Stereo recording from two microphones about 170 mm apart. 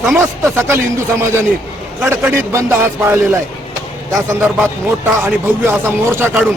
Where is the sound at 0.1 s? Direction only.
15° right (ahead or behind).